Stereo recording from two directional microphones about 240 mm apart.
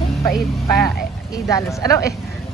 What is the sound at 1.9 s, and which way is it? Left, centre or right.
Speech, centre.